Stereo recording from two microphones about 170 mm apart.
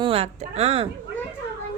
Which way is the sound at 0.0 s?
35° right (ahead or behind).